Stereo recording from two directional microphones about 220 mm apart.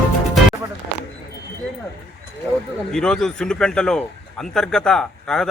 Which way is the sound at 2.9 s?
5° left (ahead or behind).